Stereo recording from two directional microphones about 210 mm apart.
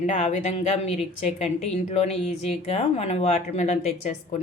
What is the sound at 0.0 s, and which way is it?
A woman's voice, 35° left (ahead or behind).